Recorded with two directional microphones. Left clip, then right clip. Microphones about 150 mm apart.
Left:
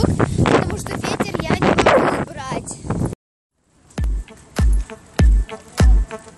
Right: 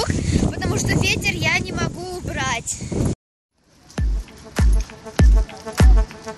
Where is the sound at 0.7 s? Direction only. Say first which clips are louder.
Right 2 dB; 10° left (ahead or behind).